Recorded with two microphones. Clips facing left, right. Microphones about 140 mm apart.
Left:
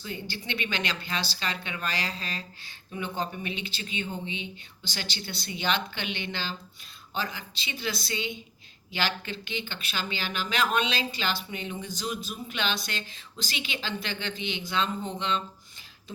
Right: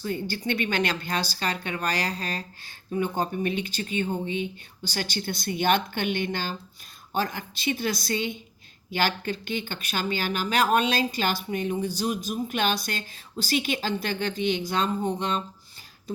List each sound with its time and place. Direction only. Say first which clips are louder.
0.0 s speech: right 8 dB; 45° right (ahead or behind)